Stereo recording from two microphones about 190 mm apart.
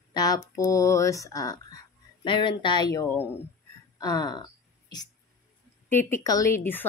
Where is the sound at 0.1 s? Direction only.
20° left (ahead or behind).